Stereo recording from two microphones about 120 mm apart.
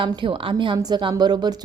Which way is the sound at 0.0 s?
45° right (ahead or behind).